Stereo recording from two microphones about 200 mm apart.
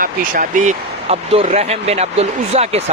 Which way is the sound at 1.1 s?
30° right (ahead or behind).